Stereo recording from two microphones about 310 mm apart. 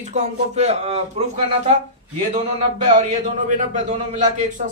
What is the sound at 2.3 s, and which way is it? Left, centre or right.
Speech, centre.